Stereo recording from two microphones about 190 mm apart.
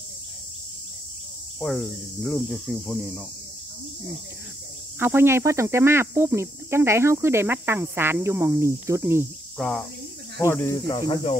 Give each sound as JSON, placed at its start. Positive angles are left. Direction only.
{"t": 1.6, "sound": "speech", "side_deg": 5}
{"t": 4.9, "sound": "speech", "side_deg": -10}
{"t": 9.6, "sound": "speech", "side_deg": 0}
{"t": 10.4, "sound": "speech", "side_deg": 15}